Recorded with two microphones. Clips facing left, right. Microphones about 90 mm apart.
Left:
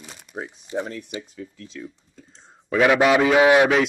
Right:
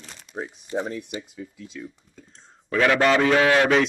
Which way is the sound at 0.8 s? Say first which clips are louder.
Even; 10° right (ahead or behind).